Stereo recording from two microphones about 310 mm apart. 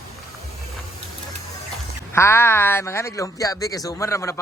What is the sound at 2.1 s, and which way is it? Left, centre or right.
Speech, centre.